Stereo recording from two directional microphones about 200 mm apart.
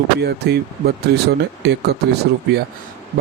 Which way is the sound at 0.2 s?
55° right (ahead or behind).